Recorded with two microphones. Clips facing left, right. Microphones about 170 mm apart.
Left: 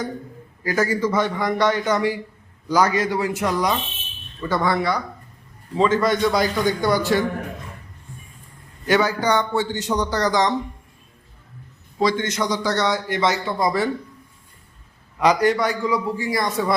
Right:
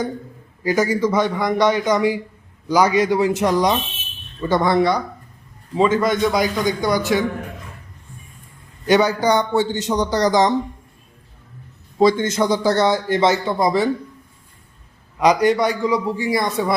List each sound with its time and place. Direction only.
0.6 s a man's voice: 20° right (ahead or behind)
8.9 s a man's voice: 20° right (ahead or behind)
11.9 s a man's voice: 25° right (ahead or behind)
15.2 s a man's voice: 15° right (ahead or behind)